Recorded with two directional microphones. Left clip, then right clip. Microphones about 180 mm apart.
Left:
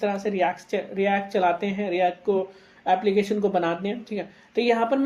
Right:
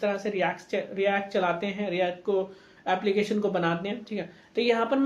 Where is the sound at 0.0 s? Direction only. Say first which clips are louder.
Left 3 dB; 50° left (ahead or behind).